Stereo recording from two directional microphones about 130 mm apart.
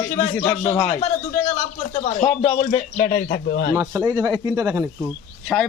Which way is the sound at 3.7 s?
25° right (ahead or behind).